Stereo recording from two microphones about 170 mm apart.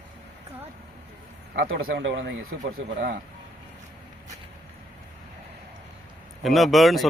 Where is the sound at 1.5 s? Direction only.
65° right (ahead or behind); by 2.3 s 90° right.